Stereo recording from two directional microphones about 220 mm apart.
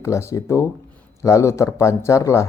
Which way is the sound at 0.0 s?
15° left (ahead or behind).